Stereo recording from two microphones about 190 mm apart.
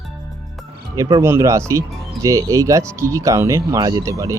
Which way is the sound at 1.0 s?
20° right (ahead or behind).